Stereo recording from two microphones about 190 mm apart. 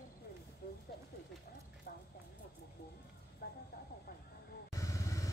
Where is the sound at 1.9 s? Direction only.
50° left (ahead or behind).